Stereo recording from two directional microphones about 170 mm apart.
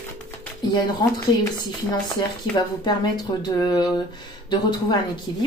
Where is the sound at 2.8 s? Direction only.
25° left (ahead or behind).